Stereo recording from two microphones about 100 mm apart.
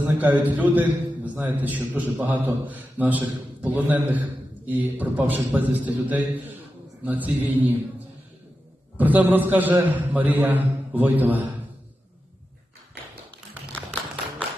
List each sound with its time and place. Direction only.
0.0 s a man's voice: 15° right (ahead or behind)